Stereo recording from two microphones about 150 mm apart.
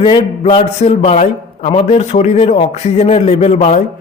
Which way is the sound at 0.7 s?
45° left (ahead or behind).